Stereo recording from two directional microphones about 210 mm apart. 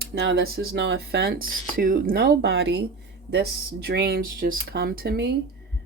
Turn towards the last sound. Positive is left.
turn(degrees=-50)  # may be behind; listen again after turning